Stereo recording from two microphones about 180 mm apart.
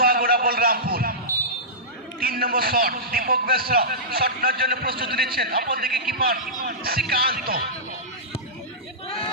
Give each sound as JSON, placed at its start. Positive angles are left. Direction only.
{"t": 0.0, "sound": "a sound", "side_deg": -55}
{"t": 2.2, "sound": "a man's voice", "side_deg": -55}
{"t": 9.0, "sound": "hubbub", "side_deg": 30}